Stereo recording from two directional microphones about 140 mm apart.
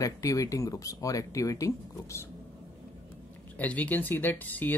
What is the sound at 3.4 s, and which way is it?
Speech, 10° left (ahead or behind).